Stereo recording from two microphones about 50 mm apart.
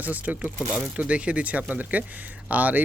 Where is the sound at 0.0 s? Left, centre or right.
Right.